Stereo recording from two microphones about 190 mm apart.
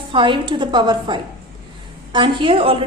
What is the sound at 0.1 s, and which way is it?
A woman's voice, 25° right (ahead or behind).